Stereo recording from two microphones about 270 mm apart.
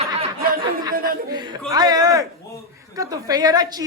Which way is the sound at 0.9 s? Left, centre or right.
Right.